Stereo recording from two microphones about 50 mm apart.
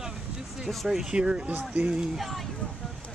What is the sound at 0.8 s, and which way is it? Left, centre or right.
Speech, centre.